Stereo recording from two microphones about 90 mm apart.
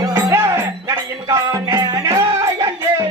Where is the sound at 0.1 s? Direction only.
30° right (ahead or behind).